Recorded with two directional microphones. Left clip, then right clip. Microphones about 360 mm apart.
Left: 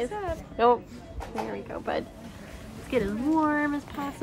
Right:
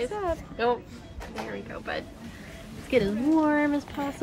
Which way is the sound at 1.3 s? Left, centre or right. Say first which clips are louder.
Left 2 dB; centre.